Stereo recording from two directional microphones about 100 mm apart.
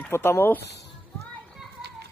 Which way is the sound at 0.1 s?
25° left (ahead or behind).